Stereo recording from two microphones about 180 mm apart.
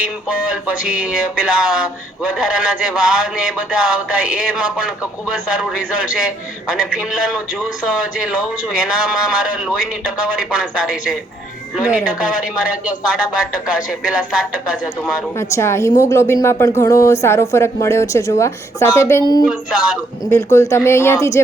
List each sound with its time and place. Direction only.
0.3 s a man's voice: 5° right (ahead or behind)
15.4 s a woman's voice: 15° left (ahead or behind)
19.5 s a man's voice: 5° right (ahead or behind)
20.3 s a woman's voice: 15° left (ahead or behind)